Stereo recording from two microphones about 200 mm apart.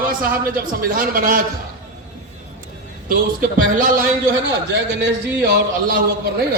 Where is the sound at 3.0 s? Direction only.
45° right (ahead or behind).